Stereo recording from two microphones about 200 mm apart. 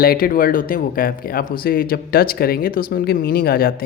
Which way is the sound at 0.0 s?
50° left (ahead or behind).